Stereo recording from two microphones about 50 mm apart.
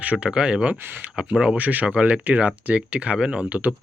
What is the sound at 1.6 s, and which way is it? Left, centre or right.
Speech, right.